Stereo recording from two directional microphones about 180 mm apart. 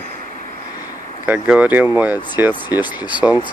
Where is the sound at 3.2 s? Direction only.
10° right (ahead or behind).